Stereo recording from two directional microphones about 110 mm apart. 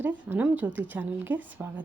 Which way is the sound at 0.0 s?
15° right (ahead or behind).